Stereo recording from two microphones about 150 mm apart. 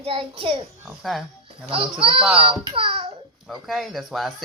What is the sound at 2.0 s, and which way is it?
A child's voice, 40° right (ahead or behind).